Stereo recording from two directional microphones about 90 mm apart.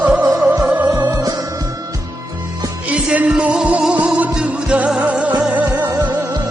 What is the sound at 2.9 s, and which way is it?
Music, 15° right (ahead or behind).